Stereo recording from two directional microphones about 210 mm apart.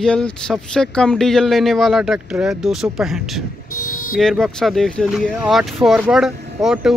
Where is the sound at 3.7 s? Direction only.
90° left.